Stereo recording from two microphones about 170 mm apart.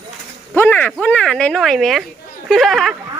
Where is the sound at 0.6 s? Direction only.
10° left (ahead or behind).